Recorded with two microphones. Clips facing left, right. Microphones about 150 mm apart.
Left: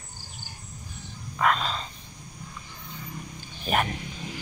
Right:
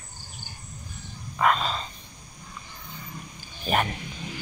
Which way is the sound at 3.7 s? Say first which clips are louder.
Right 1 dB; centre (ahead or behind).